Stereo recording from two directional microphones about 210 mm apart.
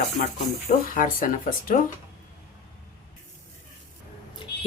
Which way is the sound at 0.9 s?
40° left (ahead or behind).